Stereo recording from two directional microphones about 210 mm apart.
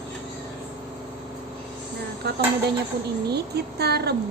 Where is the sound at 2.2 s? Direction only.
50° right (ahead or behind).